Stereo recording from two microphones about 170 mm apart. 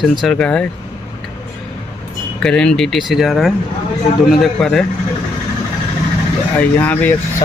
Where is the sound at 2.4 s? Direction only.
5° left (ahead or behind).